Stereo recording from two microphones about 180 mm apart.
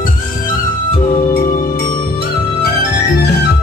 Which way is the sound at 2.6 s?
65° left (ahead or behind).